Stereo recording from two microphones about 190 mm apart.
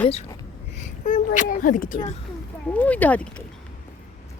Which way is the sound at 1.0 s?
40° left (ahead or behind).